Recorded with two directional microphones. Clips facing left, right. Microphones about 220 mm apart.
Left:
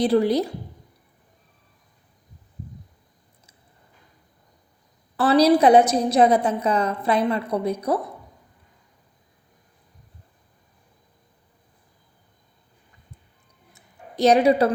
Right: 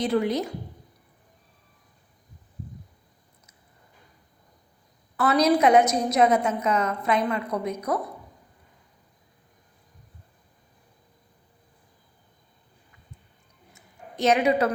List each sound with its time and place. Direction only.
0.0 s a woman's voice: 35° left (ahead or behind)
5.1 s a woman's voice: 30° left (ahead or behind)
13.7 s a sound: 35° left (ahead or behind)